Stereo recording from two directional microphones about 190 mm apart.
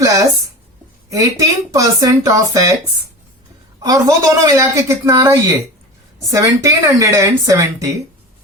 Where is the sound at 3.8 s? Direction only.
20° right (ahead or behind).